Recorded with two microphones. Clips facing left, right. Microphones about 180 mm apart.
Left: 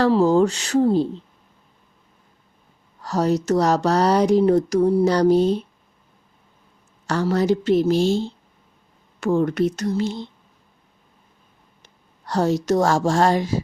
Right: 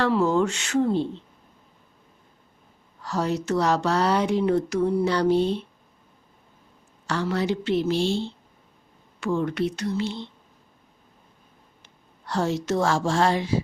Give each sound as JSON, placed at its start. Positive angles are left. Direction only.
{"t": 0.0, "sound": "speech", "side_deg": 35}
{"t": 3.0, "sound": "speech", "side_deg": 40}
{"t": 7.1, "sound": "a woman's voice", "side_deg": 45}
{"t": 11.8, "sound": "a woman's voice", "side_deg": 40}